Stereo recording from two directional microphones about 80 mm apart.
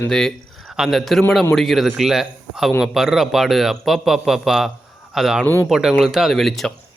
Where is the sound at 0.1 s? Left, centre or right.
Centre.